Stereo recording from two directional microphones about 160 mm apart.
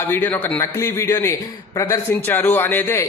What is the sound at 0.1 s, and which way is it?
A man's voice, 10° left (ahead or behind).